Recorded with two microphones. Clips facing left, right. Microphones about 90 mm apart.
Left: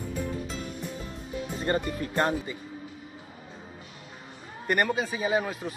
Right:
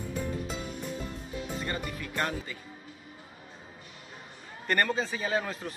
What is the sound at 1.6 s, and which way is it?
Speech, 35° left (ahead or behind).